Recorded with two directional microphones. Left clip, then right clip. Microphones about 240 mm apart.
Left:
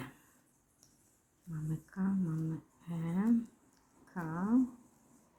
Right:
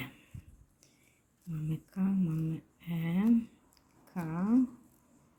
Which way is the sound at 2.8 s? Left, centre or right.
Centre.